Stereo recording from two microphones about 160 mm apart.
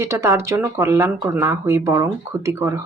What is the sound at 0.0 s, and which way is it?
Speech, 20° right (ahead or behind).